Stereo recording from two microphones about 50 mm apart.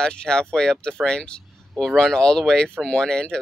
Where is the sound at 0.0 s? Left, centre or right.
Centre.